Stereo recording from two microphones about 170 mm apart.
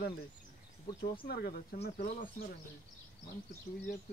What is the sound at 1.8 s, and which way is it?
Speech, 50° left (ahead or behind).